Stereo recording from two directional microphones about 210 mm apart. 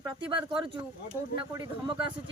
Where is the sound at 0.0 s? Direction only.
20° right (ahead or behind).